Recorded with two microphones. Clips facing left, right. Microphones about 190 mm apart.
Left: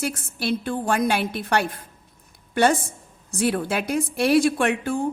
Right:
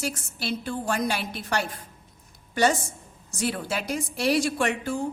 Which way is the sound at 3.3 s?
55° left (ahead or behind).